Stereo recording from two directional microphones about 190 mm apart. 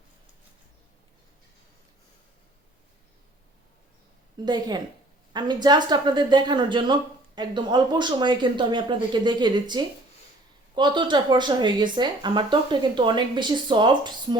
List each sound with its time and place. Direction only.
4.4 s a woman's voice: 20° right (ahead or behind)